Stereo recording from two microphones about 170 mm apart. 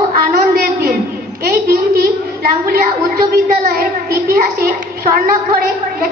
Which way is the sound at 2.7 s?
65° right (ahead or behind).